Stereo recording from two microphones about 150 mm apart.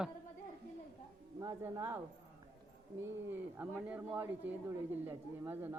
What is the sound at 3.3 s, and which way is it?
A man's voice, 10° right (ahead or behind).